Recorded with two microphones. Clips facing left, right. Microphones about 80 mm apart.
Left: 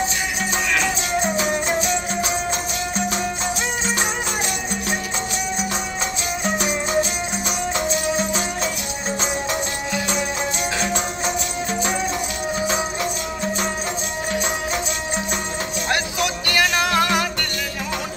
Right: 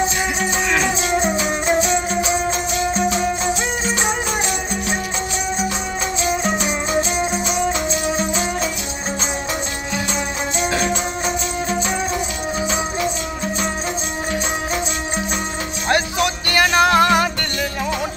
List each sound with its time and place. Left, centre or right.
0.7 s music: centre
8.2 s music: centre
15.9 s music: centre